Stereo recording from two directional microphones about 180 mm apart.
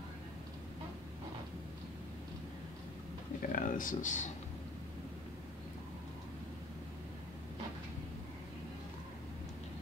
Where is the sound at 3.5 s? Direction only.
45° left (ahead or behind).